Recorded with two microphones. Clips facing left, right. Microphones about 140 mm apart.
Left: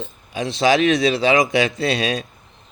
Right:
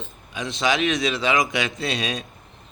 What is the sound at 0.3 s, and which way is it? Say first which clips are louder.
Speech: left 6 dB; 35° left (ahead or behind).